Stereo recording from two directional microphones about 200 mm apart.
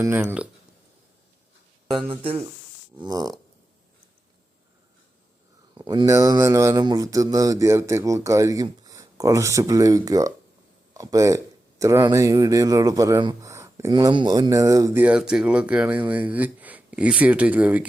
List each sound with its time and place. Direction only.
0.0 s speech: 10° right (ahead or behind)
2.0 s fart: 30° right (ahead or behind)
5.7 s speech: 20° right (ahead or behind)